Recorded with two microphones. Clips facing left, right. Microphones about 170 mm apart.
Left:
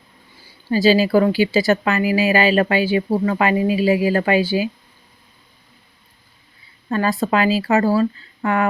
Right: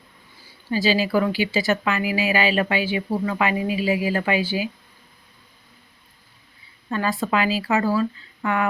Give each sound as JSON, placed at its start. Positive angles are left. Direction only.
{"t": 0.7, "sound": "speech", "side_deg": 40}
{"t": 6.9, "sound": "speech", "side_deg": 40}